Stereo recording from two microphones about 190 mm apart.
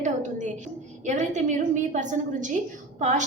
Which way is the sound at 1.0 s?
40° right (ahead or behind).